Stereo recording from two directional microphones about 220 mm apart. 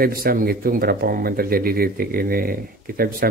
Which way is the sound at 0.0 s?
40° right (ahead or behind).